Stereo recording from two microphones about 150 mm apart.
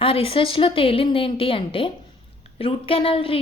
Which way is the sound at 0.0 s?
40° left (ahead or behind).